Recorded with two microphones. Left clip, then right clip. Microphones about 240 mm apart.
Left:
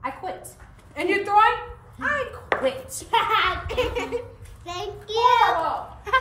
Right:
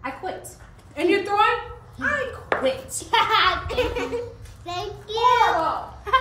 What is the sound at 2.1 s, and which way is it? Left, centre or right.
Speech, centre.